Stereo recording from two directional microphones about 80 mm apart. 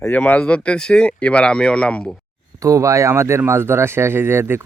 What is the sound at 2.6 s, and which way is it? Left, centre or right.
Speech, right.